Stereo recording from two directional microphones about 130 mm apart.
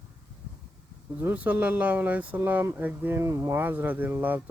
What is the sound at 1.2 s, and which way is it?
Speech, 10° right (ahead or behind).